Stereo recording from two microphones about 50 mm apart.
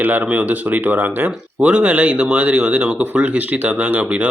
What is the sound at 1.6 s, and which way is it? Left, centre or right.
Speech, right.